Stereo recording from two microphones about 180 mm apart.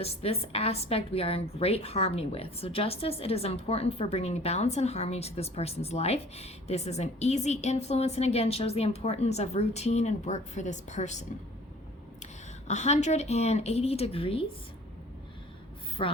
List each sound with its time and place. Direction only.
0.0 s a woman's voice: 35° left (ahead or behind)
16.0 s a woman's voice: 30° left (ahead or behind)